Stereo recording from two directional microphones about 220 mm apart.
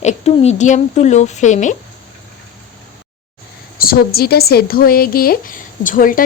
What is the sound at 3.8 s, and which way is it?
A woman's voice, 45° left (ahead or behind).